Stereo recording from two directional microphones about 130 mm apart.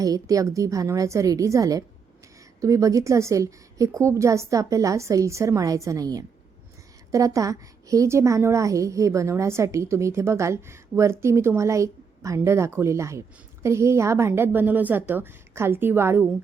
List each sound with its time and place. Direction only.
0.0 s a woman's voice: 25° right (ahead or behind)